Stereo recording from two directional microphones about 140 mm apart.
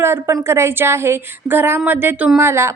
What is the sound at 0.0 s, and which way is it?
A woman's voice, 20° right (ahead or behind).